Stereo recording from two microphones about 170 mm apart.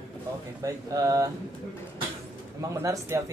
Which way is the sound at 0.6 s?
20° right (ahead or behind).